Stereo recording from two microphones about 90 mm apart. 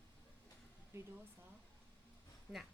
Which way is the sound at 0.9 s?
30° right (ahead or behind).